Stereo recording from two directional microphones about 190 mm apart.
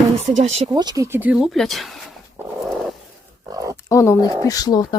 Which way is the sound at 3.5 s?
20° right (ahead or behind).